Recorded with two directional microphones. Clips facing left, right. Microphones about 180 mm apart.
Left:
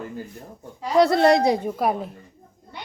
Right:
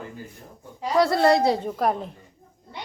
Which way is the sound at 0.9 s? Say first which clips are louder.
Left 2 dB; 20° left (ahead or behind).